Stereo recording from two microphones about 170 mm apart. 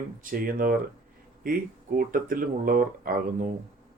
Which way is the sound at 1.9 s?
55° right (ahead or behind).